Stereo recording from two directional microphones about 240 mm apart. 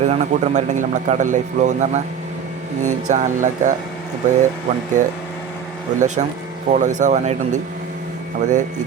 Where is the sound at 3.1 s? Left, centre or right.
Right.